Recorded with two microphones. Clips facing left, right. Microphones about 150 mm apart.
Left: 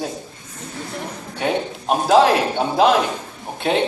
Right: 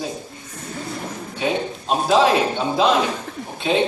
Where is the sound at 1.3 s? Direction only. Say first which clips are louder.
Left 1 dB; 55° left (ahead or behind).